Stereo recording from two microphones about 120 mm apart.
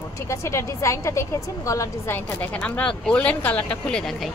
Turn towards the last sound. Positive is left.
turn(degrees=5)  # may be behind; listen again after turning